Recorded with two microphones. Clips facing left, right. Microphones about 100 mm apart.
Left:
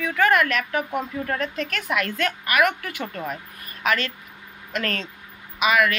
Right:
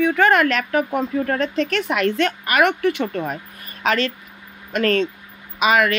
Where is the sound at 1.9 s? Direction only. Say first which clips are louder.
Right 3 dB; 25° right (ahead or behind).